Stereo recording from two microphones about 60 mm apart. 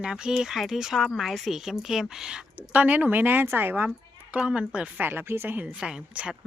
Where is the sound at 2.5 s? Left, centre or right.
Right.